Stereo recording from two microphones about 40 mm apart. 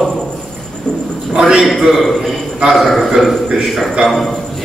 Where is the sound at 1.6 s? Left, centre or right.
Centre.